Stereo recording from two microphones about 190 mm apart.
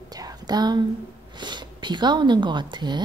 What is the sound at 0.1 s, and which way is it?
Whispering, 20° right (ahead or behind).